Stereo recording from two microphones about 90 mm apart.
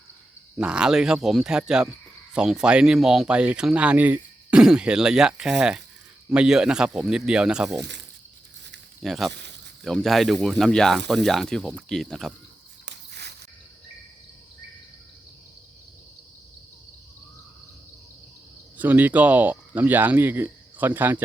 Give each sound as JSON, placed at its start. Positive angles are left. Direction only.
{"t": 0.5, "sound": "speech", "side_deg": -10}
{"t": 9.0, "sound": "speech", "side_deg": 0}
{"t": 18.8, "sound": "speech", "side_deg": -20}